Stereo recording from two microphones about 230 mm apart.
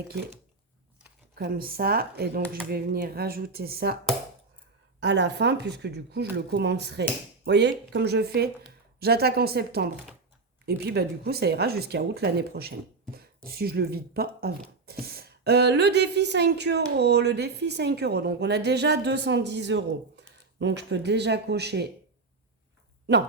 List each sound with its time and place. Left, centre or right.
1.4 s speech: right
4.9 s speech: right